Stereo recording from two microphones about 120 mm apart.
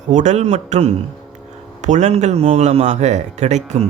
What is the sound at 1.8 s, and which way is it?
Speech, 80° right.